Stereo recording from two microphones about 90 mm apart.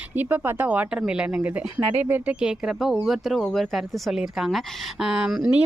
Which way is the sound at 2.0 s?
20° right (ahead or behind).